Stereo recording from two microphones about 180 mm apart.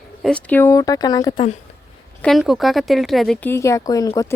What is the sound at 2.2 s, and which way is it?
A woman's voice, centre (ahead or behind).